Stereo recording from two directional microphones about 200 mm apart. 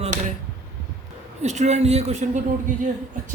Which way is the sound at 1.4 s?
35° right (ahead or behind).